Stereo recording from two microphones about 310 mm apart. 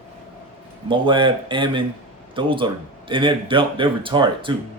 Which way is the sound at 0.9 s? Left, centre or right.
Centre.